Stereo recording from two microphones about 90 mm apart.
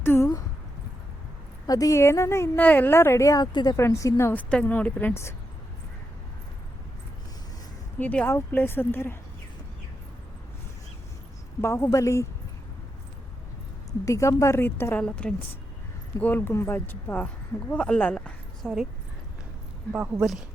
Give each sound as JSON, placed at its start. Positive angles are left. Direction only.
{"t": 0.0, "sound": "a sound", "side_deg": 25}
{"t": 1.6, "sound": "a woman's voice", "side_deg": 40}
{"t": 2.6, "sound": "speech", "side_deg": 20}
{"t": 3.2, "sound": "a woman's voice", "side_deg": 40}
{"t": 3.8, "sound": "a woman's voice", "side_deg": 35}
{"t": 4.4, "sound": "speech", "side_deg": 15}
{"t": 7.9, "sound": "speech", "side_deg": 20}
{"t": 11.6, "sound": "a woman's voice", "side_deg": 30}
{"t": 14.0, "sound": "a woman's voice", "side_deg": 35}
{"t": 14.9, "sound": "speech", "side_deg": 15}
{"t": 16.2, "sound": "speech", "side_deg": 25}
{"t": 18.6, "sound": "speech", "side_deg": 0}
{"t": 19.9, "sound": "speech", "side_deg": -15}